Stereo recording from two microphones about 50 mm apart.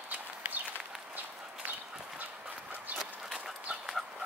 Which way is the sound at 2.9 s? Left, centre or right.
Right.